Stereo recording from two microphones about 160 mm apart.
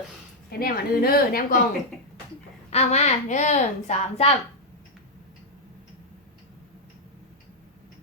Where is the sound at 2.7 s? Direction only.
40° left (ahead or behind).